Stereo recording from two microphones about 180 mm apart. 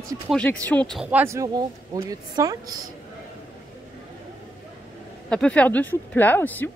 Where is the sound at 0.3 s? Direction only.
5° left (ahead or behind).